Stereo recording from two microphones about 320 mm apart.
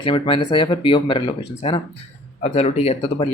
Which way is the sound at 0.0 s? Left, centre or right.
Centre.